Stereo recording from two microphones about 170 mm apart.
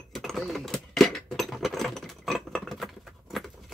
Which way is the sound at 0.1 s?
Centre (ahead or behind).